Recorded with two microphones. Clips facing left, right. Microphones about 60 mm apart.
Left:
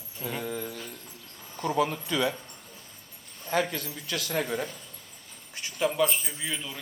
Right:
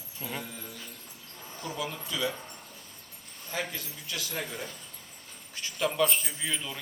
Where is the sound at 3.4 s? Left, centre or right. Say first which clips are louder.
Left 7 dB; left.